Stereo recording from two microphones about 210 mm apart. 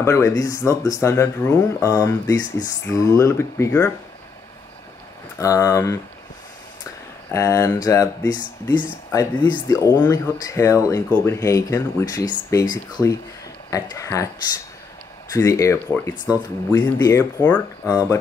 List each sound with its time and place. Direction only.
0.0 s speech: 15° left (ahead or behind)
5.4 s speech: 15° left (ahead or behind)
7.2 s speech: 15° left (ahead or behind)
15.3 s speech: 15° left (ahead or behind)